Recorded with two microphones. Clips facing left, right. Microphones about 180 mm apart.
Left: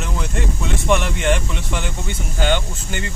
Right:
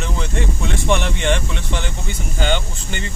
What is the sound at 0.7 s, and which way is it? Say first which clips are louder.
Speech: left 1 dB; 5° left (ahead or behind).